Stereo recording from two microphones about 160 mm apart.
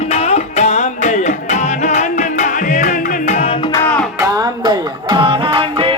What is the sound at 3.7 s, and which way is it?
Music, 10° left (ahead or behind).